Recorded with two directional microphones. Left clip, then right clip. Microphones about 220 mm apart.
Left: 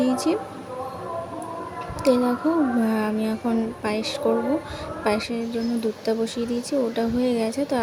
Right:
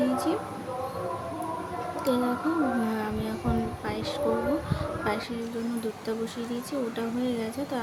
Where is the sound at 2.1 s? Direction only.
25° left (ahead or behind).